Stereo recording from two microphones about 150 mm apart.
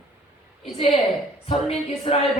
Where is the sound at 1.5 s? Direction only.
40° left (ahead or behind).